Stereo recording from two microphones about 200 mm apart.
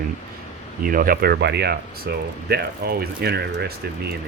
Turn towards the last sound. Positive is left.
turn(degrees=-55)  # may be behind; listen again after turning